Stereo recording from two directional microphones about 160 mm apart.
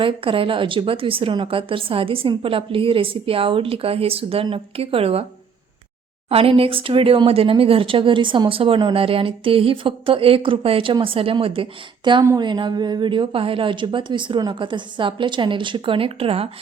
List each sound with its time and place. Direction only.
0.0 s speech: 35° right (ahead or behind)
6.2 s speech: 35° right (ahead or behind)